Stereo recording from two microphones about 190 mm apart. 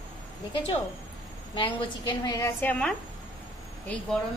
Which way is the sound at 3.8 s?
5° left (ahead or behind).